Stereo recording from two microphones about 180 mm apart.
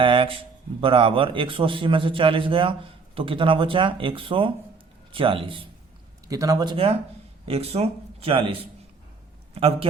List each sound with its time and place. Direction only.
0.0 s a man's voice: 30° right (ahead or behind)
6.2 s a man's voice: 20° right (ahead or behind)
9.6 s a man's voice: 30° right (ahead or behind)